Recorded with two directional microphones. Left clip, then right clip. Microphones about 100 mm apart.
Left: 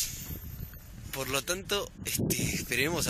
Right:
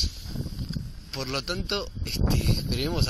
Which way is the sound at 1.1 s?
25° left (ahead or behind).